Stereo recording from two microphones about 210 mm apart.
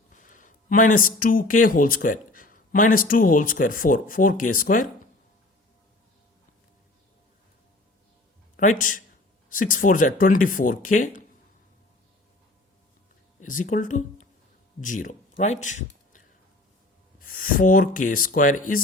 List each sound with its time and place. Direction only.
0.2 s speech: 40° left (ahead or behind)
8.5 s speech: 40° left (ahead or behind)
13.4 s speech: 40° left (ahead or behind)